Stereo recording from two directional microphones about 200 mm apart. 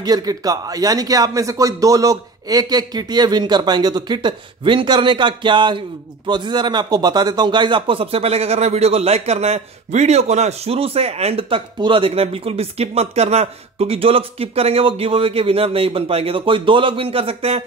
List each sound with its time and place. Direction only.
0.0 s a man's voice: 20° right (ahead or behind)